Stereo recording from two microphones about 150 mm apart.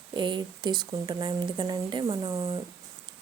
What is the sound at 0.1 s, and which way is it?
Speech, 30° right (ahead or behind).